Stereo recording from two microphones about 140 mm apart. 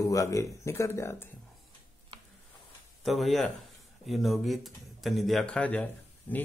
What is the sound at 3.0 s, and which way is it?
Speech, centre (ahead or behind).